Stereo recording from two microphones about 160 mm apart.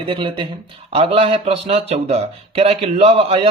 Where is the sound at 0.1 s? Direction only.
30° right (ahead or behind).